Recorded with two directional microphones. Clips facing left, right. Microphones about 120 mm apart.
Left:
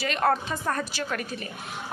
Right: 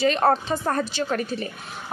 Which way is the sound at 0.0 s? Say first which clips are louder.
Right 5 dB; 30° right (ahead or behind).